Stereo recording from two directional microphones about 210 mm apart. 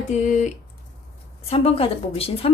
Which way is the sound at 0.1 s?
35° left (ahead or behind).